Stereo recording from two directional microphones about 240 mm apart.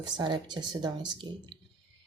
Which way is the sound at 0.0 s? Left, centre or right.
Centre.